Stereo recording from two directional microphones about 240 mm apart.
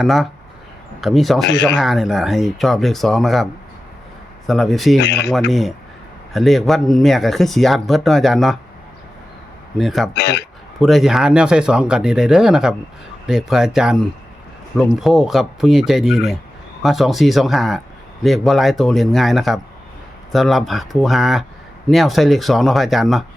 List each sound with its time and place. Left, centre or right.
0.0 s a man's voice: centre
4.9 s speech: left
5.5 s a man's voice: centre
9.7 s a man's voice: centre
10.2 s speech: left
10.8 s a man's voice: centre